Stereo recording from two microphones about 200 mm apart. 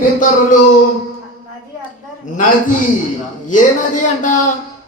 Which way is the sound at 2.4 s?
40° left (ahead or behind).